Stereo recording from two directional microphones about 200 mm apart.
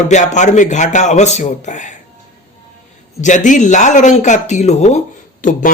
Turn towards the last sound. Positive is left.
turn(degrees=40)  # may be behind; listen again after turning